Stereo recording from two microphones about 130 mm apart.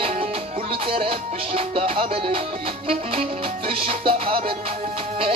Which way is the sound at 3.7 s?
45° right (ahead or behind).